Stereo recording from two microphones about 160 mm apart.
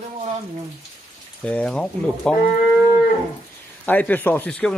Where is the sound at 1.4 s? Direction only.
5° left (ahead or behind).